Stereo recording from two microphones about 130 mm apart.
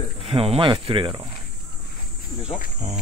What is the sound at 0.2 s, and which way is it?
Speech, 45° right (ahead or behind).